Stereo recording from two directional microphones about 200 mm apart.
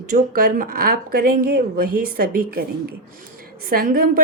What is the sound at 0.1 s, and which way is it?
Speech, 45° right (ahead or behind).